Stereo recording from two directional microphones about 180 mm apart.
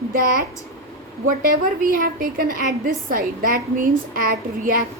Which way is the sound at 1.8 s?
50° right (ahead or behind).